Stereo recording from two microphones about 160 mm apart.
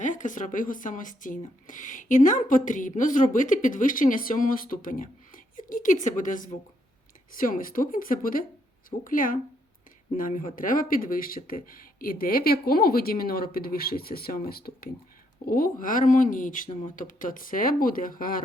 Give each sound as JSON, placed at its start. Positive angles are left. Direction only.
{"t": 0.0, "sound": "a woman's voice", "side_deg": 50}